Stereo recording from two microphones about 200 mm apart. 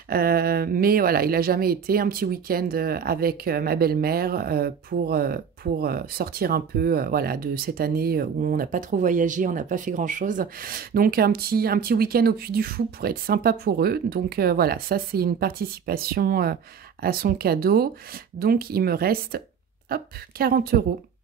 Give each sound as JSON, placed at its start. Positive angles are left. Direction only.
{"t": 0.1, "sound": "speech", "side_deg": -50}